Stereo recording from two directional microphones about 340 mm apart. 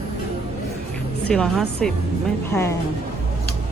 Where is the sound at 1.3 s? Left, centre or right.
Centre.